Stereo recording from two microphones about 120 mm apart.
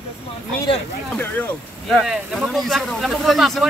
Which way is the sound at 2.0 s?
5° right (ahead or behind).